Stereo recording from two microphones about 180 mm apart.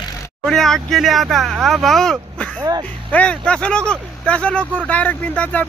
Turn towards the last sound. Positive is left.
turn(degrees=10)  # may be behind; listen again after turning